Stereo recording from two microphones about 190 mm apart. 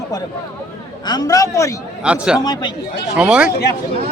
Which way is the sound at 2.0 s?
5° right (ahead or behind).